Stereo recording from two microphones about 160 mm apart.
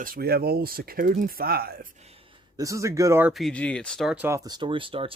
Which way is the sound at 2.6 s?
20° right (ahead or behind).